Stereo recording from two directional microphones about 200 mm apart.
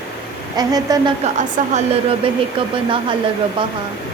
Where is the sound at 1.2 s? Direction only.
35° right (ahead or behind).